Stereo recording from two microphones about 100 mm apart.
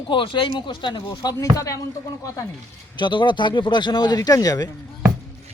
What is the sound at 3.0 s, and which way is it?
Speech, 50° left (ahead or behind).